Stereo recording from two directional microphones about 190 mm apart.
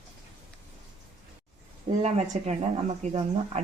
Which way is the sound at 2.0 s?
35° right (ahead or behind).